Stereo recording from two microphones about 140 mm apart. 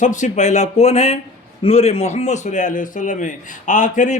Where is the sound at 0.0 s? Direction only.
60° left (ahead or behind).